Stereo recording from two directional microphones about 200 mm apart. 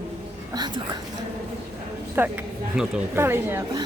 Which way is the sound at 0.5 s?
20° right (ahead or behind).